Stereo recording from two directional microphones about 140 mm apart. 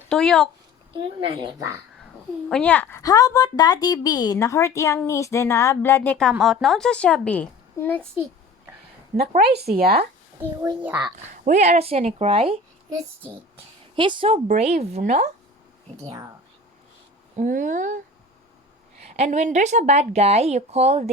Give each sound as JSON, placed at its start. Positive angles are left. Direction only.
{"t": 0.1, "sound": "speech", "side_deg": 5}
{"t": 0.9, "sound": "speech", "side_deg": -35}
{"t": 2.5, "sound": "a woman's voice", "side_deg": 10}
{"t": 3.0, "sound": "a woman's voice", "side_deg": 25}
{"t": 9.3, "sound": "speech", "side_deg": -90}
{"t": 10.5, "sound": "a child's voice", "side_deg": -30}
{"t": 10.8, "sound": "a child's voice", "side_deg": -10}
{"t": 11.4, "sound": "a woman's voice", "side_deg": -60}
{"t": 13.9, "sound": "a woman's voice", "side_deg": -35}
{"t": 14.3, "sound": "speech", "side_deg": -60}
{"t": 16.0, "sound": "a child's voice", "side_deg": -25}
{"t": 17.3, "sound": "speech", "side_deg": -65}
{"t": 19.0, "sound": "a woman's voice", "side_deg": -50}